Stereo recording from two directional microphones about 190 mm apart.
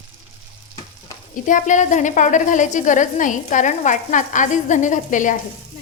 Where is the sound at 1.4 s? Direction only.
40° left (ahead or behind).